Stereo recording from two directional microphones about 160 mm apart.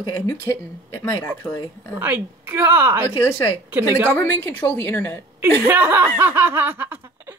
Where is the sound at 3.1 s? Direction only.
15° left (ahead or behind).